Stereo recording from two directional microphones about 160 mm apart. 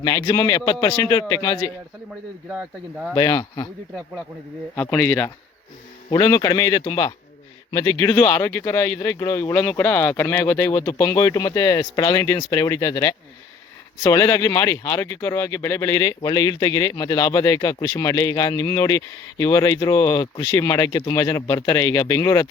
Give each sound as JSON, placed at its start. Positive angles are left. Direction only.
{"t": 0.0, "sound": "speech", "side_deg": 20}
{"t": 3.2, "sound": "speech", "side_deg": 25}
{"t": 4.7, "sound": "speech", "side_deg": 15}